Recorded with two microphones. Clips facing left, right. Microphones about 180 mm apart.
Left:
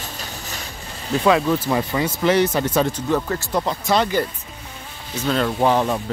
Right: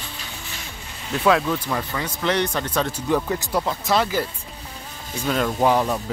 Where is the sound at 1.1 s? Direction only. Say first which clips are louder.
Left 2 dB; centre (ahead or behind).